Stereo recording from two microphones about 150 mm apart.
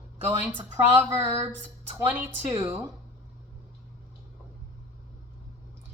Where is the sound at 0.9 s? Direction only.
15° right (ahead or behind).